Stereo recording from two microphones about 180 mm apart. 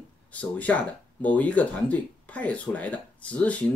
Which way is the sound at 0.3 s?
10° left (ahead or behind).